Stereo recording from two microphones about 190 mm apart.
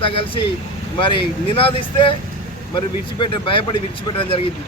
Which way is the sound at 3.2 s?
25° left (ahead or behind).